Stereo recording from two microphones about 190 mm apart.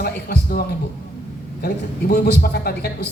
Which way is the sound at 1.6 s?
55° left (ahead or behind).